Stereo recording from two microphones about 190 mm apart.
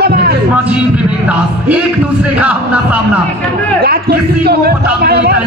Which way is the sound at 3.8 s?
55° right (ahead or behind).